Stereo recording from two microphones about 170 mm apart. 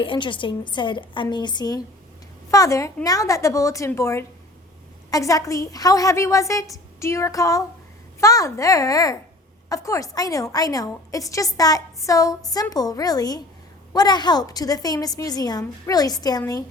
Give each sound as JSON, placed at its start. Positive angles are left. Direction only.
{"t": 0.0, "sound": "a woman's voice", "side_deg": 30}